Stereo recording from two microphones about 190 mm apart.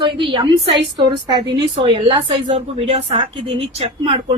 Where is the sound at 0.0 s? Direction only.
25° right (ahead or behind).